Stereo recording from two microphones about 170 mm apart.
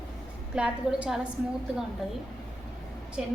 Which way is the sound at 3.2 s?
5° right (ahead or behind).